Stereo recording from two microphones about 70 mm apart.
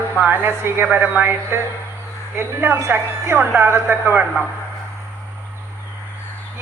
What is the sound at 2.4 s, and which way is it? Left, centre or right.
Speech, right.